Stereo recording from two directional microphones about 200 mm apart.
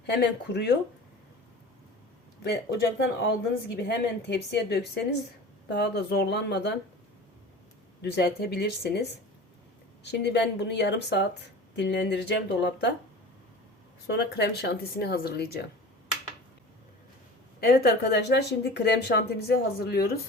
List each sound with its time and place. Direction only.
0.0 s speech: 55° left (ahead or behind)
2.4 s speech: 55° left (ahead or behind)
8.0 s speech: 55° left (ahead or behind)
14.1 s speech: 55° left (ahead or behind)
17.6 s speech: 50° left (ahead or behind)